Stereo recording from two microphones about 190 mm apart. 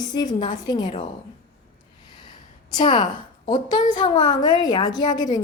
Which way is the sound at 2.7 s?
25° left (ahead or behind).